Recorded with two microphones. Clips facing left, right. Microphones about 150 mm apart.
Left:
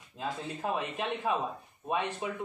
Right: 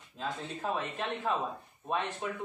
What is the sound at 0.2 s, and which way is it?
Speech, 15° left (ahead or behind).